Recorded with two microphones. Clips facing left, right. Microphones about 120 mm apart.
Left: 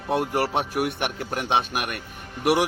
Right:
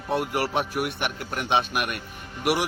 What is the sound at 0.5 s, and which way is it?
Speech, 40° left (ahead or behind).